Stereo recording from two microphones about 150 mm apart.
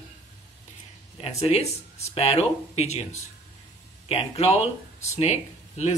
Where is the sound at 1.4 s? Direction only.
45° left (ahead or behind).